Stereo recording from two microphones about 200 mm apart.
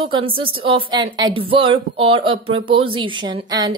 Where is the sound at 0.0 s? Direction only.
25° right (ahead or behind).